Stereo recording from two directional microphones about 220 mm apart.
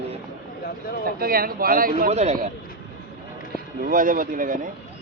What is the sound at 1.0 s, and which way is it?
Speech, 40° right (ahead or behind).